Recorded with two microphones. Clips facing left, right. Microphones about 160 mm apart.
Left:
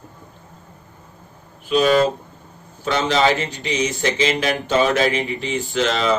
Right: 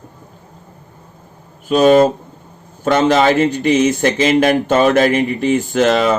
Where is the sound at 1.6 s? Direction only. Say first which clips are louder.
Right 6 dB; 45° right (ahead or behind).